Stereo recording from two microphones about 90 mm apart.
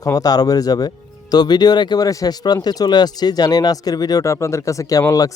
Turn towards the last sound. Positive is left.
turn(degrees=40)  # may be behind; listen again after turning